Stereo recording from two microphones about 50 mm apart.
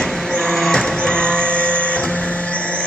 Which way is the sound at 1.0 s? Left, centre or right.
Centre.